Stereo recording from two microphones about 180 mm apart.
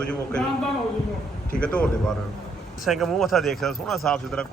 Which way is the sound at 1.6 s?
5° left (ahead or behind).